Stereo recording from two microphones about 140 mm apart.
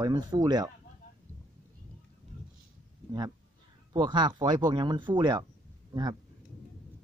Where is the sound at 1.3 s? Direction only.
20° right (ahead or behind).